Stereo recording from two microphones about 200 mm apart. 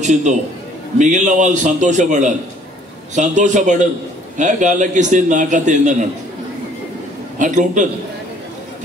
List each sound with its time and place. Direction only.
0.0 s a man's voice: 35° right (ahead or behind)
7.3 s a man's voice: 40° right (ahead or behind)